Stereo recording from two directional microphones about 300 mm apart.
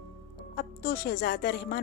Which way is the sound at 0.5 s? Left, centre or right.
Left.